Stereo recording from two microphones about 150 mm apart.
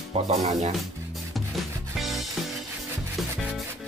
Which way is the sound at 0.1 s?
45° right (ahead or behind).